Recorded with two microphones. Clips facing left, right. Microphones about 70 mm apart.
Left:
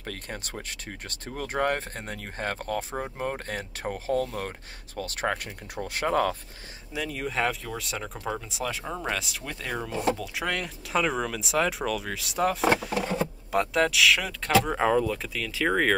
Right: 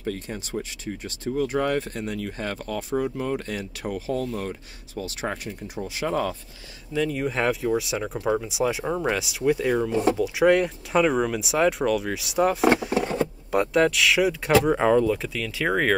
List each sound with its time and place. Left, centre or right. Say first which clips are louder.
0.0 s speech: right 6 dB; left
7.1 s speech: right 1 dB; centre